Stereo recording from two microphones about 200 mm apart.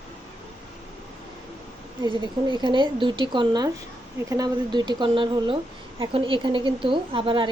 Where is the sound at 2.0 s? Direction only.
20° right (ahead or behind).